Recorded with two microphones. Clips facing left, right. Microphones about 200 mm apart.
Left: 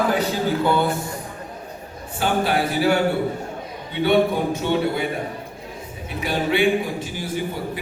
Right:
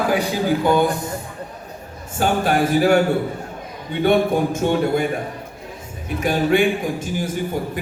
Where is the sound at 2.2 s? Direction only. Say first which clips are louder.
Right 3 dB; 50° right (ahead or behind).